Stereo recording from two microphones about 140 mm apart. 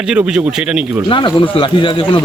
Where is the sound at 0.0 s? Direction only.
5° right (ahead or behind).